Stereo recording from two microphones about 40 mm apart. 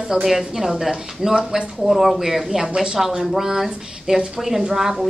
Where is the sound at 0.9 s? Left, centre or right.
Centre.